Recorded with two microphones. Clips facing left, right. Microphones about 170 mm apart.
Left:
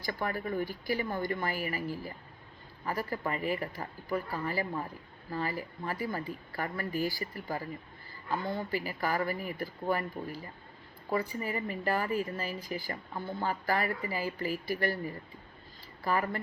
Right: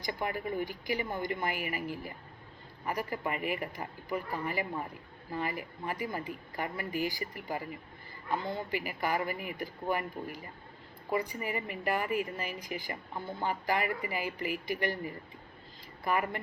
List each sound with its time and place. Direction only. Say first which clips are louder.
0.0 s a woman's voice: even; 15° right (ahead or behind)